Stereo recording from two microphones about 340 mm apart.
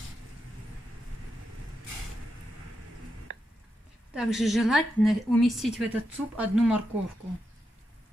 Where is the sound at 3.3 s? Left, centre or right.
Right.